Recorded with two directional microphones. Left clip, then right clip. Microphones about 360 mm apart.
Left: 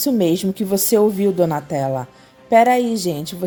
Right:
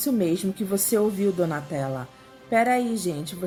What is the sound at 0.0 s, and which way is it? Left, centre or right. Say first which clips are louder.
A woman's voice: left 7 dB; centre.